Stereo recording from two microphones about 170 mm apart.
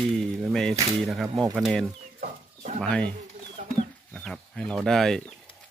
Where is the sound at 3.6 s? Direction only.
45° right (ahead or behind).